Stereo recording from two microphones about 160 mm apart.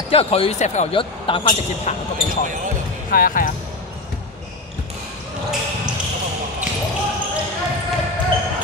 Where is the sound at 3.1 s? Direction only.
60° left (ahead or behind).